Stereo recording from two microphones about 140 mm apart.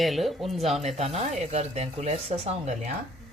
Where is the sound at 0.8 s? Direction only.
50° right (ahead or behind).